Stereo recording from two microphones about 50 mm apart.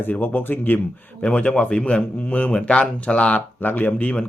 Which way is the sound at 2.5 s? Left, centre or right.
Centre.